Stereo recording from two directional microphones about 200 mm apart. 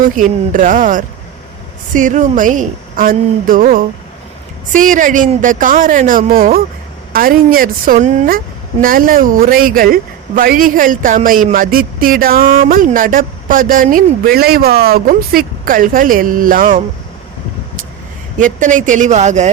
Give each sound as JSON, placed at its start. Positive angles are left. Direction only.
{"t": 0.2, "sound": "a woman's voice", "side_deg": -40}
{"t": 18.3, "sound": "a woman's voice", "side_deg": -40}